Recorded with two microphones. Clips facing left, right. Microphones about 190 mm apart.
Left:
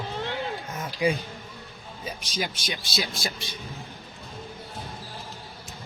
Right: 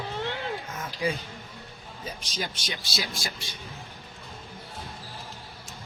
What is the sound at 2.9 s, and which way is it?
Speech, 25° left (ahead or behind).